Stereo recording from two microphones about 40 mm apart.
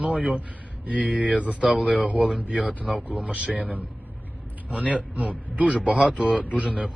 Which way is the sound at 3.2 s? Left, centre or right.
Right.